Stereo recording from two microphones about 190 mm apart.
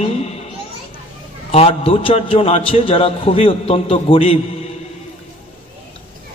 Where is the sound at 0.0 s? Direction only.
35° left (ahead or behind).